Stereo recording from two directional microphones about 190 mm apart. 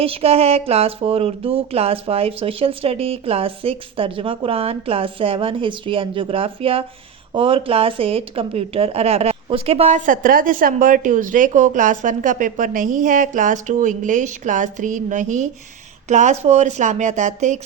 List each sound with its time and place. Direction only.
0.0 s speech: 30° right (ahead or behind)